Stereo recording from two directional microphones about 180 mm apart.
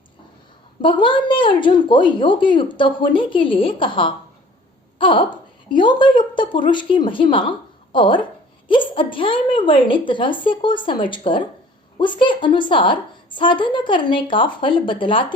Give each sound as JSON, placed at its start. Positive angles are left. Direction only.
{"t": 0.8, "sound": "a woman's voice", "side_deg": 25}